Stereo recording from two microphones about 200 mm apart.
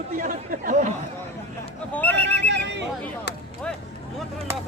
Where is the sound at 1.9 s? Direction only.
10° left (ahead or behind).